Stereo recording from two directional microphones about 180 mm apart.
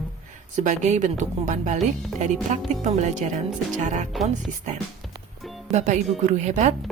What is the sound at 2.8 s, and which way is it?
Speech, 40° right (ahead or behind).